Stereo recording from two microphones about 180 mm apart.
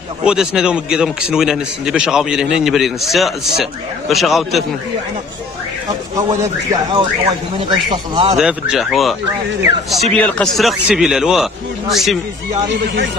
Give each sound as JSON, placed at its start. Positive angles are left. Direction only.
{"t": 0.2, "sound": "a man's voice", "side_deg": -5}
{"t": 6.2, "sound": "a man's voice", "side_deg": -20}
{"t": 8.4, "sound": "a man's voice", "side_deg": -5}
{"t": 10.1, "sound": "a man's voice", "side_deg": 5}
{"t": 12.6, "sound": "speech", "side_deg": -80}